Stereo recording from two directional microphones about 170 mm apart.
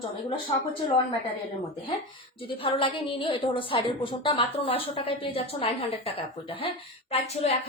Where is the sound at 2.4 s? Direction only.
30° left (ahead or behind).